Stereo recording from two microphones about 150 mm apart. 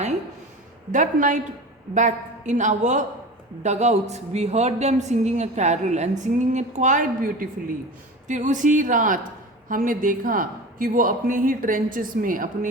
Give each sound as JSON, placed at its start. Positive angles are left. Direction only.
{"t": 0.9, "sound": "a woman's voice", "side_deg": -55}